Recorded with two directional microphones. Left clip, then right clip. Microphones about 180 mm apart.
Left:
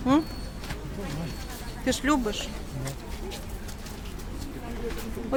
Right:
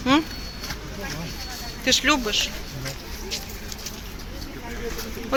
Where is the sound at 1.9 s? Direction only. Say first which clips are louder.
Right 6 dB; 30° left (ahead or behind).